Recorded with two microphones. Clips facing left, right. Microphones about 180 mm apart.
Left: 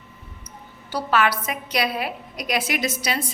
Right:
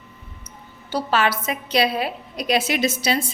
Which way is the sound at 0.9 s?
25° right (ahead or behind).